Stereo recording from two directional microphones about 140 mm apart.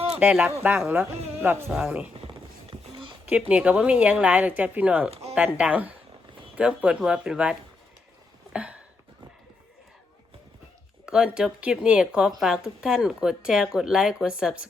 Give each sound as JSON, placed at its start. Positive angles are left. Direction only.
{"t": 0.2, "sound": "speech", "side_deg": -10}
{"t": 2.1, "sound": "music", "side_deg": -40}
{"t": 3.5, "sound": "speech", "side_deg": -10}
{"t": 8.5, "sound": "a sound", "side_deg": -10}
{"t": 11.0, "sound": "speech", "side_deg": -5}